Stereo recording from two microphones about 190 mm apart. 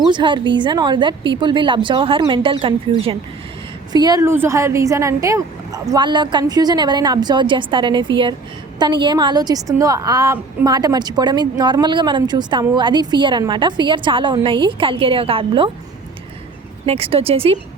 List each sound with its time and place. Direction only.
0.1 s a woman's voice: 25° right (ahead or behind)
16.8 s a woman's voice: 30° right (ahead or behind)